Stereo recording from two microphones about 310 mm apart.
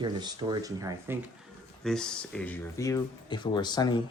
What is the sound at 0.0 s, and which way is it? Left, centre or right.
Speech, centre.